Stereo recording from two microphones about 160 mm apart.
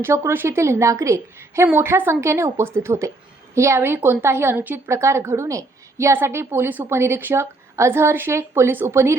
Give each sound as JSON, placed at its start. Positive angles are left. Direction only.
{"t": 0.0, "sound": "a woman's voice", "side_deg": -15}